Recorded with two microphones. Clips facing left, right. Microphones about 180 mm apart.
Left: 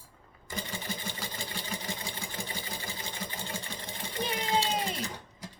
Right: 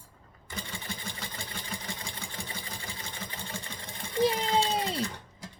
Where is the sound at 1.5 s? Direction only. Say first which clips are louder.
Left 2 dB; 35° left (ahead or behind).